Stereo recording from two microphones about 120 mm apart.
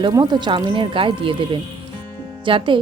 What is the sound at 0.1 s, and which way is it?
Speech, 35° right (ahead or behind).